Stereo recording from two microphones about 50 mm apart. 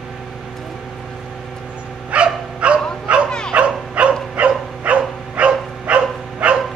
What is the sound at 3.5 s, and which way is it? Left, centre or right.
Dog, right.